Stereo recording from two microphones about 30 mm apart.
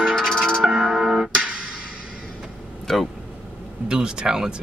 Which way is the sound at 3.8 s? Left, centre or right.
Right.